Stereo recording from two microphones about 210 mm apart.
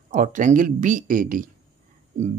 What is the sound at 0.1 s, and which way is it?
Speech, 40° right (ahead or behind).